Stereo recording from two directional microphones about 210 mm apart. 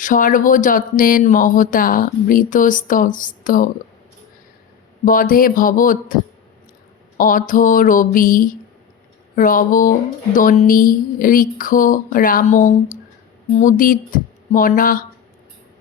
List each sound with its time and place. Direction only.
0.0 s speech: 40° left (ahead or behind)
5.0 s speech: 40° left (ahead or behind)
7.2 s speech: 40° left (ahead or behind)